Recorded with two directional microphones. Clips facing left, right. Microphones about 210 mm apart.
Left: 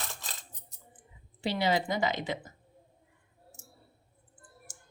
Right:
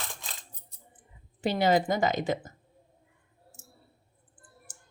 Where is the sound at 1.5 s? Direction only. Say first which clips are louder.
Right 4 dB; 50° right (ahead or behind).